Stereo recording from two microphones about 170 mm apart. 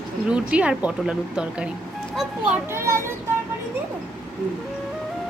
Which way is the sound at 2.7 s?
15° right (ahead or behind).